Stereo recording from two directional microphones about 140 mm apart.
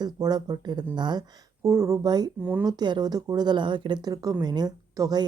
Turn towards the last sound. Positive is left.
turn(degrees=-30)  # may be behind; listen again after turning